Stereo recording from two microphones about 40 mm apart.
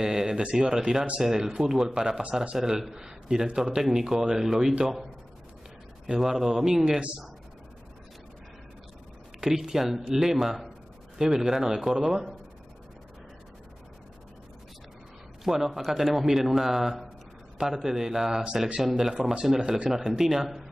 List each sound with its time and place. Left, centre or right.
0.0 s a man's voice: centre
6.0 s a man's voice: centre
9.4 s a man's voice: centre
15.4 s a man's voice: centre